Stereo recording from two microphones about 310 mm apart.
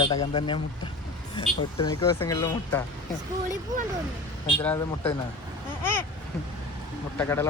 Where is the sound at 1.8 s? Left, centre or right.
Centre.